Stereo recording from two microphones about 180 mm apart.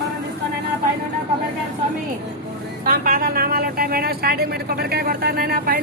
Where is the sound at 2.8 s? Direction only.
50° right (ahead or behind).